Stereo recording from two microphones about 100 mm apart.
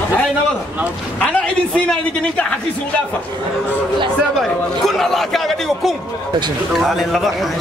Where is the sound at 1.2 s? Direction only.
10° left (ahead or behind).